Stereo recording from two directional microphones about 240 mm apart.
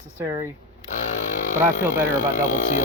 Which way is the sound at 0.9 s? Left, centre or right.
Left.